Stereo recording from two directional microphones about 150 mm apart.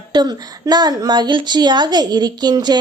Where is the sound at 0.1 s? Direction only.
25° right (ahead or behind).